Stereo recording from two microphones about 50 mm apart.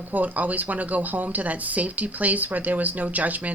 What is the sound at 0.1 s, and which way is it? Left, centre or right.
A woman's voice, right.